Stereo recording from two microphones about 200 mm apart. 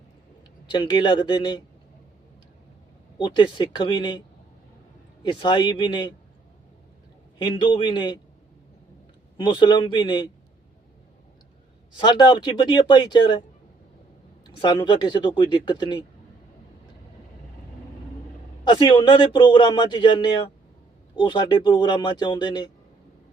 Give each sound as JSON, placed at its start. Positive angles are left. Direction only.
{"t": 0.7, "sound": "a man's voice", "side_deg": 20}
{"t": 3.2, "sound": "a man's voice", "side_deg": 25}
{"t": 5.2, "sound": "a man's voice", "side_deg": 20}
{"t": 7.3, "sound": "a man's voice", "side_deg": 25}
{"t": 9.4, "sound": "a man's voice", "side_deg": 20}
{"t": 11.9, "sound": "a man's voice", "side_deg": 20}
{"t": 14.4, "sound": "a man's voice", "side_deg": 20}
{"t": 18.6, "sound": "a man's voice", "side_deg": 20}